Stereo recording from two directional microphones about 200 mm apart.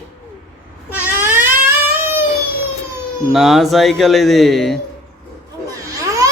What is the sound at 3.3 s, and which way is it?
Speech, centre (ahead or behind).